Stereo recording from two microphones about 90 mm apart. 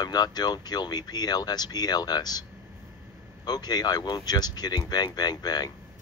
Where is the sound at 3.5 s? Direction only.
50° left (ahead or behind).